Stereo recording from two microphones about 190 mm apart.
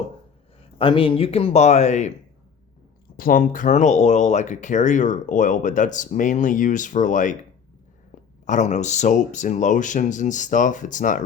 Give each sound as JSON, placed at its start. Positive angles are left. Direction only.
{"t": 0.6, "sound": "speech", "side_deg": 25}
{"t": 3.2, "sound": "speech", "side_deg": 45}
{"t": 8.4, "sound": "speech", "side_deg": 40}